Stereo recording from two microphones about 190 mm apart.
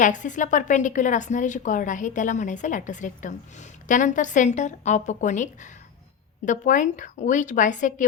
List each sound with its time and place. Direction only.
0.0 s a woman's voice: 40° left (ahead or behind)